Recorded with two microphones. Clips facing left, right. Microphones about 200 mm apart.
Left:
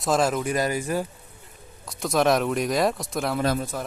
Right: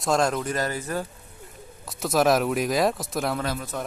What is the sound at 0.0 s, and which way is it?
Speech, centre (ahead or behind).